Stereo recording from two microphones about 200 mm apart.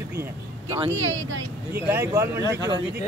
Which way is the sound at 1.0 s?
80° right.